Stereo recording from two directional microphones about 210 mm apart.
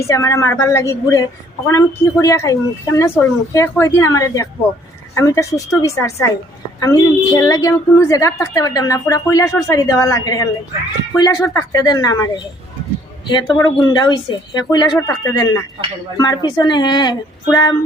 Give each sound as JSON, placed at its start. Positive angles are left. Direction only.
{"t": 0.0, "sound": "a woman's voice", "side_deg": 15}